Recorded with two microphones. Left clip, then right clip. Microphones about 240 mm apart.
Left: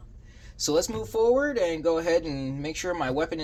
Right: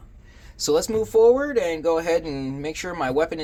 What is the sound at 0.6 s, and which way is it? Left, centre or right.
Speech, right.